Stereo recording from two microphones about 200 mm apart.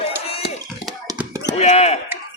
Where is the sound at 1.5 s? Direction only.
35° left (ahead or behind).